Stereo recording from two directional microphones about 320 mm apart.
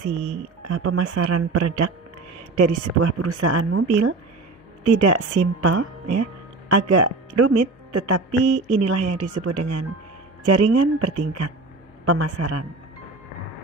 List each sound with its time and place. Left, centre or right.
0.6 s speech: right